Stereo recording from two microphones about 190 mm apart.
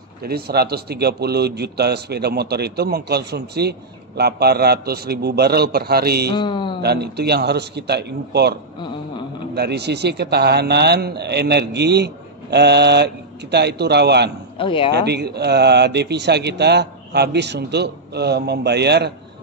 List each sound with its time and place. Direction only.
0.2 s a man's voice: 55° right (ahead or behind)
6.3 s speech: 25° left (ahead or behind)
6.8 s a man's voice: 60° right (ahead or behind)
14.6 s speech: 25° left (ahead or behind)
14.9 s a man's voice: 60° right (ahead or behind)